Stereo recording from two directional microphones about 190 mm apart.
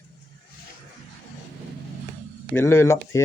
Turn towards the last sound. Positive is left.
turn(degrees=15)  # may be behind; listen again after turning